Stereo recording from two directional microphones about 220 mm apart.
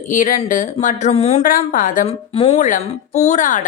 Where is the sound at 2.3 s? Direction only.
25° left (ahead or behind).